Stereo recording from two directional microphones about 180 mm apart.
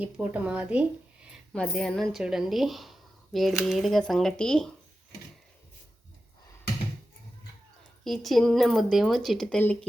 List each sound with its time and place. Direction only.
0.0 s a woman's voice: 10° right (ahead or behind)
8.0 s a woman's voice: centre (ahead or behind)